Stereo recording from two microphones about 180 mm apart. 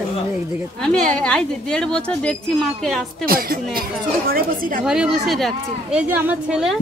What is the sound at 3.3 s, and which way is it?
Speech, 55° right (ahead or behind).